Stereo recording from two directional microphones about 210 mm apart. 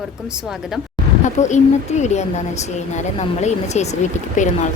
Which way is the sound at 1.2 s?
35° left (ahead or behind).